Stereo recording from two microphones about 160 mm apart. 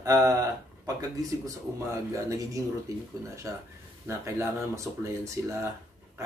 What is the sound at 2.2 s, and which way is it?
Speech, 20° right (ahead or behind).